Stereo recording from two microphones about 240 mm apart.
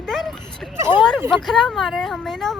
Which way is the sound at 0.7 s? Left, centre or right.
Centre.